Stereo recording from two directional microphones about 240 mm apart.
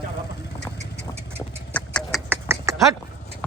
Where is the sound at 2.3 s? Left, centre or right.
Centre.